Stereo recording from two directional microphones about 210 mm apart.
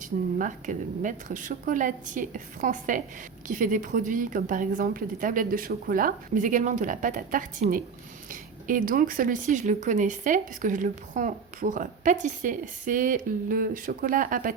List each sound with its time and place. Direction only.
0.0 s speech: 40° right (ahead or behind)